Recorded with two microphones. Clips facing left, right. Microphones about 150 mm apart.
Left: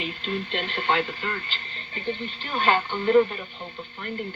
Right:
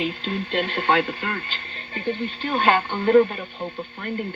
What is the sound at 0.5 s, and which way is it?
Speech, 45° right (ahead or behind).